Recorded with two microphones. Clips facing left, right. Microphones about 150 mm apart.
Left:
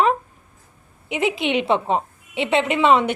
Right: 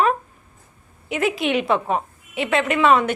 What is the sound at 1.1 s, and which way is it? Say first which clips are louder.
A woman's voice: even; 20° left (ahead or behind).